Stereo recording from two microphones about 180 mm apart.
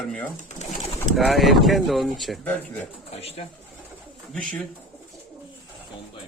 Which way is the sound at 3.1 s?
35° left (ahead or behind).